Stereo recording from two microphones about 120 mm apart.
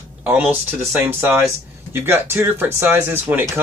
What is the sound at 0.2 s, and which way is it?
Speech, 15° right (ahead or behind).